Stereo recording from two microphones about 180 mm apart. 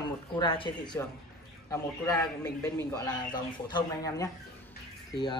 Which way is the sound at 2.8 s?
20° left (ahead or behind).